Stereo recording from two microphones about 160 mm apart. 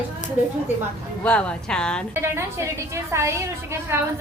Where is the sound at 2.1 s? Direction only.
15° right (ahead or behind).